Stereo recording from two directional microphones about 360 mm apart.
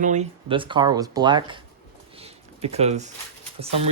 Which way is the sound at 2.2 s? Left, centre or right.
Centre.